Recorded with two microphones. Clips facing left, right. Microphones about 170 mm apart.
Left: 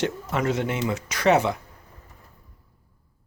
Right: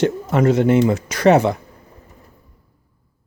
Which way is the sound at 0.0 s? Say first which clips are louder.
Right 9 dB; 40° right (ahead or behind).